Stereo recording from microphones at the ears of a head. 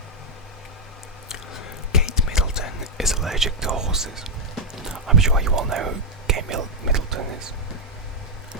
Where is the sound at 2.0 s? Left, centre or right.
Left.